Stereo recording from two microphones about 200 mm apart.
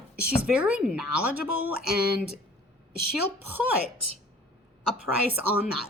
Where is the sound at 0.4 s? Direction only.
5° right (ahead or behind).